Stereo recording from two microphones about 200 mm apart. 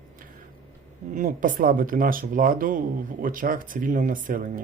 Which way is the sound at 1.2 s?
45° right (ahead or behind).